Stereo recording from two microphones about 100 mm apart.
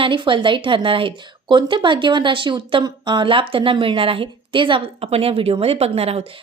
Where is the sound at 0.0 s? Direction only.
55° right (ahead or behind).